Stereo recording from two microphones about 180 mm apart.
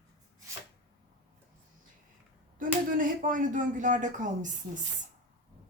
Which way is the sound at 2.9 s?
50° right (ahead or behind).